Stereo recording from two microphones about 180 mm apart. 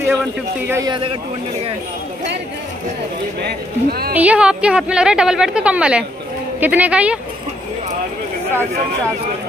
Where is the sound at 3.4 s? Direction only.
60° right (ahead or behind).